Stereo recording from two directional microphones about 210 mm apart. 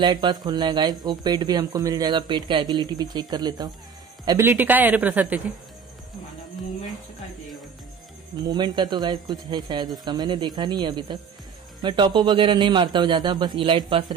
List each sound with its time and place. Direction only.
0.0 s a man's voice: 20° right (ahead or behind)
8.4 s speech: 20° right (ahead or behind)